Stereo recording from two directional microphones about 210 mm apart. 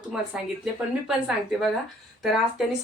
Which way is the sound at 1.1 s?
5° right (ahead or behind).